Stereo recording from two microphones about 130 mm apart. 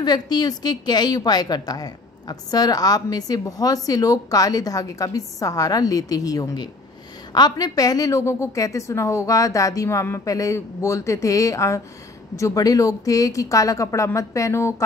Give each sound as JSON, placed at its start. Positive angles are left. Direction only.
{"t": 0.0, "sound": "a woman's voice", "side_deg": 30}